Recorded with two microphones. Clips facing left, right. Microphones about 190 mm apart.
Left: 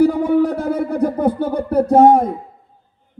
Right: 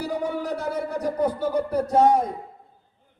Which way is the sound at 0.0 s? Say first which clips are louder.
Left 13 dB; 55° left (ahead or behind).